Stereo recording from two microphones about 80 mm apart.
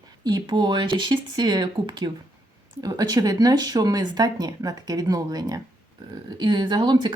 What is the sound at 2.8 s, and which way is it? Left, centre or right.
Speech, right.